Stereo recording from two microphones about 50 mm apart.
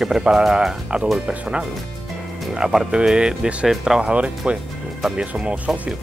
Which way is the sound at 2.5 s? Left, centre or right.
Centre.